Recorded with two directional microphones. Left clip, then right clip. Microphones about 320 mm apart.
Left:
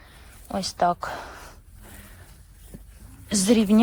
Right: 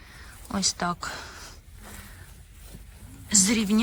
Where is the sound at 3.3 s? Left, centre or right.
Centre.